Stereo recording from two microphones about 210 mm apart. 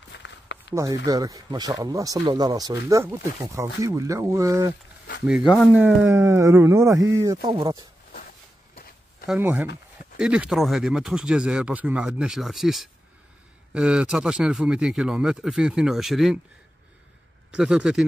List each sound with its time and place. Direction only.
0.1 s a sound: 60° left (ahead or behind)
1.0 s speech: 15° right (ahead or behind)
5.2 s speech: 5° right (ahead or behind); by 7.8 s 25° right (ahead or behind)
9.3 s speech: 5° right (ahead or behind)
17.5 s speech: 5° right (ahead or behind)